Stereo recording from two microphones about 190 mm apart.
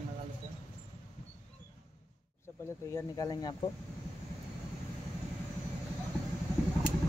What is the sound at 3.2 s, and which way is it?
Speech, 20° left (ahead or behind).